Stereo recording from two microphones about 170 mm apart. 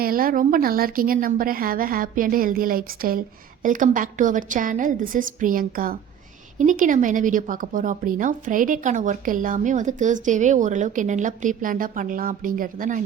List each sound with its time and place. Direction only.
0.0 s a woman's voice: 60° right (ahead or behind)